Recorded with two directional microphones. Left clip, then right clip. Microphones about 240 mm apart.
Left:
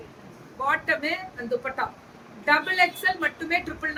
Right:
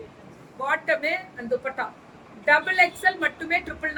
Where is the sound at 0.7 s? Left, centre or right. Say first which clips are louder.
Right 1 dB; centre.